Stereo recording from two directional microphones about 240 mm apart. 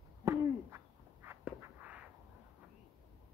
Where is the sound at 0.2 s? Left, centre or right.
Centre.